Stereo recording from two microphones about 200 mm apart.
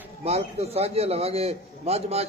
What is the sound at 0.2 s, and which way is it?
A man's voice, 30° right (ahead or behind).